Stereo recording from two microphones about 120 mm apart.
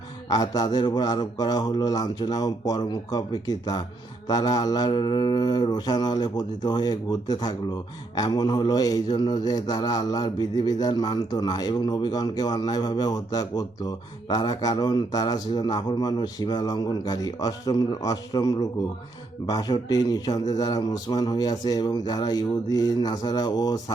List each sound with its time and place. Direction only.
0.3 s a man's voice: 30° left (ahead or behind)